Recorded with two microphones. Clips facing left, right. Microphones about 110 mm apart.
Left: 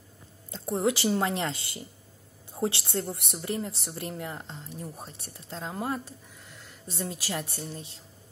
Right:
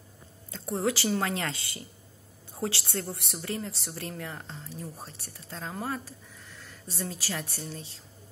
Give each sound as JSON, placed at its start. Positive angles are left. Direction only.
{"t": 0.5, "sound": "speech", "side_deg": 20}